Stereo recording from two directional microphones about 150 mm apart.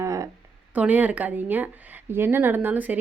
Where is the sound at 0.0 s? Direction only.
20° right (ahead or behind).